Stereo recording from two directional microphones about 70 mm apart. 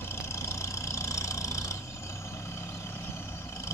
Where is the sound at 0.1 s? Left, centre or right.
Left.